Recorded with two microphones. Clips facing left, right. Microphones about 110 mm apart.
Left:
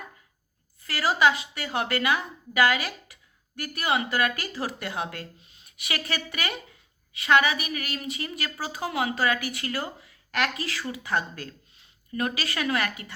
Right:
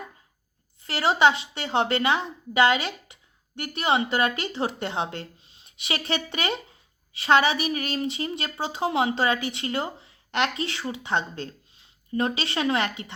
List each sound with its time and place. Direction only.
0.8 s a woman's voice: 25° right (ahead or behind)